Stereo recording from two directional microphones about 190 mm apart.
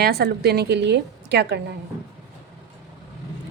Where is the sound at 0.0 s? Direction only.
55° right (ahead or behind).